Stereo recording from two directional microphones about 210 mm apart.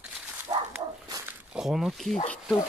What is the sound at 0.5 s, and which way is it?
Bow-wow, 20° right (ahead or behind).